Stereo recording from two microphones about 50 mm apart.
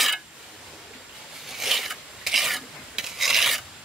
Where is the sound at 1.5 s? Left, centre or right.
Centre.